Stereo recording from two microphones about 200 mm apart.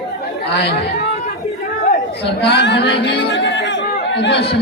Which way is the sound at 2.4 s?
60° left (ahead or behind).